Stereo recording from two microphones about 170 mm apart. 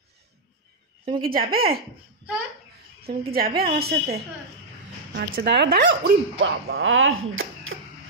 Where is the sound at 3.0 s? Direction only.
65° right (ahead or behind).